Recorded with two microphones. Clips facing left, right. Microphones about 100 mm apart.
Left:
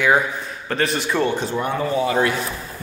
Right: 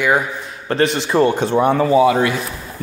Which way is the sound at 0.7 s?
25° right (ahead or behind).